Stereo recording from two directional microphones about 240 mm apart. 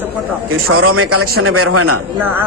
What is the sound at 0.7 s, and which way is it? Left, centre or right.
A woman's voice, right.